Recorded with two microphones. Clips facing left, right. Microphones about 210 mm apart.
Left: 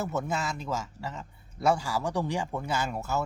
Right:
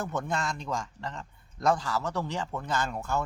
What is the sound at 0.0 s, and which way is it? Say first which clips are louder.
A man's voice: left 1 dB; 5° left (ahead or behind).